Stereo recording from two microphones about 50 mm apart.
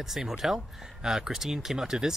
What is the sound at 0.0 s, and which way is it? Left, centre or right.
Speech, centre.